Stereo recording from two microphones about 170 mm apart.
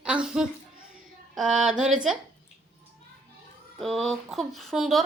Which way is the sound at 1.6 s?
5° right (ahead or behind).